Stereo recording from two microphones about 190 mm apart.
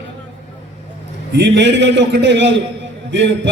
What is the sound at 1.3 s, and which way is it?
A man's voice, 65° right (ahead or behind).